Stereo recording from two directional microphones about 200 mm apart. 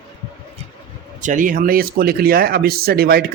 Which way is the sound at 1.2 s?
40° right (ahead or behind).